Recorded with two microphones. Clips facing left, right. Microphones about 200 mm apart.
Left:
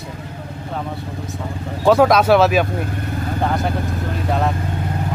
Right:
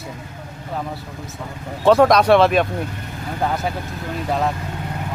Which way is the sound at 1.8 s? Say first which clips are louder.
Even; 5° left (ahead or behind).